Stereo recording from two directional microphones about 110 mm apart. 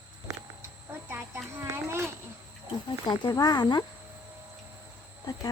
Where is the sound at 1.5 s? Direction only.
25° right (ahead or behind).